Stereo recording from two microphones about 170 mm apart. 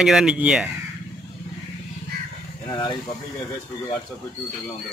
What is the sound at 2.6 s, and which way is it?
Speech, 25° left (ahead or behind).